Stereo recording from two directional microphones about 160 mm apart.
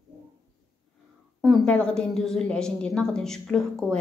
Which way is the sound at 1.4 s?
5° left (ahead or behind).